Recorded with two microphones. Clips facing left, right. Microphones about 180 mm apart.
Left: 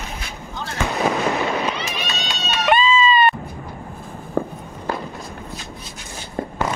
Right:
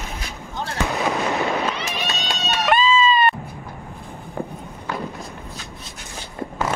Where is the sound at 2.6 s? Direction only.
Centre (ahead or behind).